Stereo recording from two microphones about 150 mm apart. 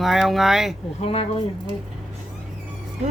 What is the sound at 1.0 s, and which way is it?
Speech, 40° left (ahead or behind).